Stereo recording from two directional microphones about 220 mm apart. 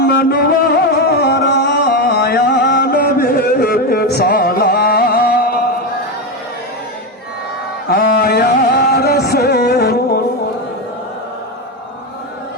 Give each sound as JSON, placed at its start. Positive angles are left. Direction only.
{"t": 0.0, "sound": "music", "side_deg": 45}
{"t": 7.9, "sound": "music", "side_deg": 45}